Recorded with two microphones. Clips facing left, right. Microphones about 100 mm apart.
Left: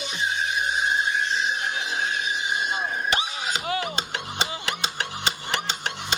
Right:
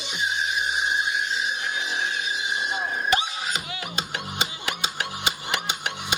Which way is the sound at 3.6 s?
50° left (ahead or behind).